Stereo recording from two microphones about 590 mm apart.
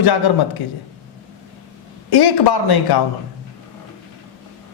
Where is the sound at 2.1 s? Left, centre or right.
Left.